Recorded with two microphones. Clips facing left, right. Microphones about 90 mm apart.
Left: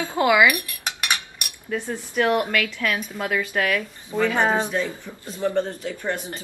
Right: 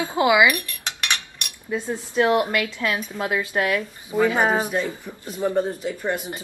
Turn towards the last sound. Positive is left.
turn(degrees=-10)  # may be behind; listen again after turning